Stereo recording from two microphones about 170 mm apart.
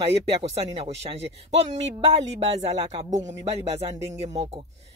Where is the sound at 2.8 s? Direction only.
40° right (ahead or behind).